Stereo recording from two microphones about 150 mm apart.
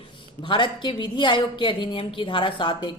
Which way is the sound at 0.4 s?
30° left (ahead or behind).